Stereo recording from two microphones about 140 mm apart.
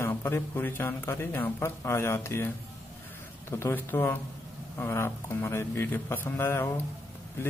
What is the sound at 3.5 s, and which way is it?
Speech, 15° left (ahead or behind).